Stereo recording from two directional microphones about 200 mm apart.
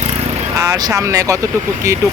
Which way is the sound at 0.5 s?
15° right (ahead or behind).